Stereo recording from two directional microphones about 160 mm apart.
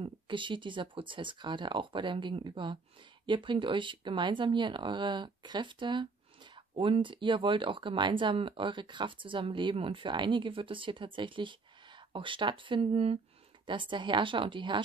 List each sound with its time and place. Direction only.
0.0 s speech: 30° right (ahead or behind)